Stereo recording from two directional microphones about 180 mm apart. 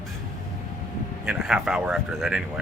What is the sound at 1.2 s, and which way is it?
Speech, 5° right (ahead or behind).